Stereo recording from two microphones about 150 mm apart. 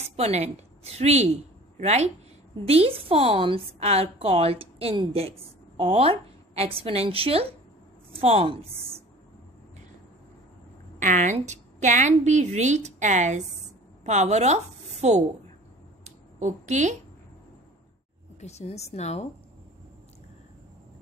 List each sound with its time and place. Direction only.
0.0 s a woman's voice: 45° right (ahead or behind)
11.0 s a woman's voice: 55° right (ahead or behind)
16.0 s a sound: 50° right (ahead or behind)
18.4 s a woman's voice: 45° left (ahead or behind)